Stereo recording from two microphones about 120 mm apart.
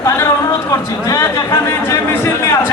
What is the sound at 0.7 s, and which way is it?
A man's voice, 25° left (ahead or behind).